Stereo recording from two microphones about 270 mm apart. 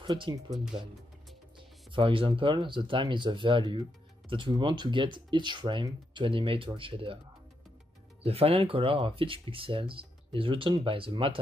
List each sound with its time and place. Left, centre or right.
0.0 s speech: centre
1.9 s speech: centre
8.2 s speech: right